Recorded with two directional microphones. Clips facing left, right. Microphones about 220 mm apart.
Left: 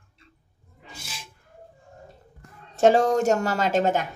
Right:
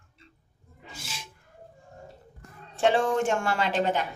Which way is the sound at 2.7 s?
40° left (ahead or behind).